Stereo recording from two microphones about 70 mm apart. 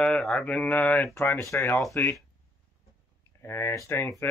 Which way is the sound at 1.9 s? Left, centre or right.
Left.